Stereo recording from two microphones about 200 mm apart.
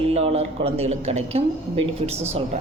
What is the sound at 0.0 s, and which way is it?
A woman's voice, 30° right (ahead or behind).